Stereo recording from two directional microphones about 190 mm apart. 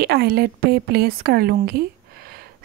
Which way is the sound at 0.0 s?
55° right (ahead or behind).